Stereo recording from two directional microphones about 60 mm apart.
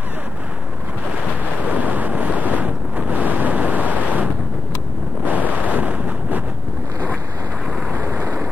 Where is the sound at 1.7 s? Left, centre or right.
Right.